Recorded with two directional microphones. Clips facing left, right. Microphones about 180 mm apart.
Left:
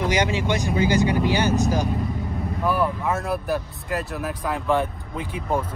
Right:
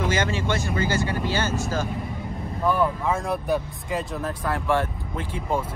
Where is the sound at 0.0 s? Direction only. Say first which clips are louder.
Left 2 dB; 15° left (ahead or behind).